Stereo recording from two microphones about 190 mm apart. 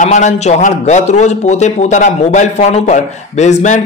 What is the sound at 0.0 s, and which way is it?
A man's voice, 40° left (ahead or behind).